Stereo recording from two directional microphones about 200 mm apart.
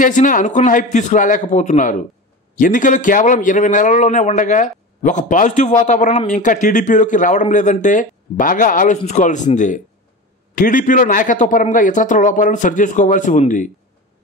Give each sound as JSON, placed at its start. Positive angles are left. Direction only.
{"t": 0.0, "sound": "a man's voice", "side_deg": 40}